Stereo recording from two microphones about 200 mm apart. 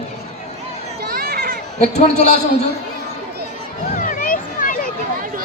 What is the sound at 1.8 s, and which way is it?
Speech, 35° left (ahead or behind).